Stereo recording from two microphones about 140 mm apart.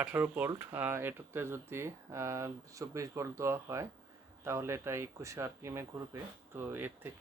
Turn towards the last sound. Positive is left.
turn(degrees=-15)  # may be behind; listen again after turning